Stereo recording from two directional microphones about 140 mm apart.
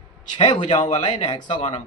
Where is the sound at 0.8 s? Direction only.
35° left (ahead or behind).